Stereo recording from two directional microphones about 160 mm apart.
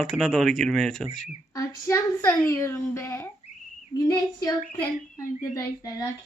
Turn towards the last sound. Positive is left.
turn(degrees=20)  # may be behind; listen again after turning